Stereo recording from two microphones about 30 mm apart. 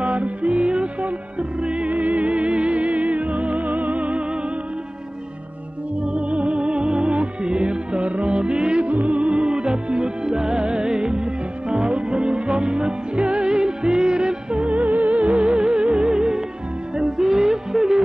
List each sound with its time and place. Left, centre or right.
0.0 s music: right
1.9 s music: right
6.1 s music: right
8.8 s music: right
14.7 s music: right; by 18.0 s centre